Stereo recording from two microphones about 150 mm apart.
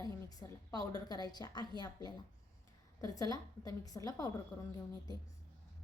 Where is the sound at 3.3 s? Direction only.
25° left (ahead or behind).